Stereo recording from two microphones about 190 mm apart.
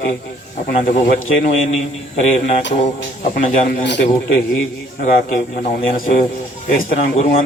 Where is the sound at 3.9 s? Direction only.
60° left (ahead or behind).